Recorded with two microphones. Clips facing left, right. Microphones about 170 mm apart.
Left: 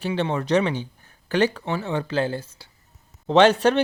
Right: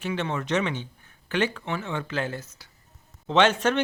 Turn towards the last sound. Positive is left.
turn(degrees=35)  # may be behind; listen again after turning